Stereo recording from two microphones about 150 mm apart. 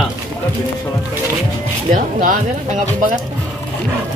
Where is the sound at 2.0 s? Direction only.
65° right (ahead or behind).